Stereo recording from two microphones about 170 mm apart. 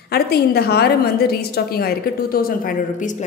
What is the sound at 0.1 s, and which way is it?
A woman's voice, 70° left (ahead or behind).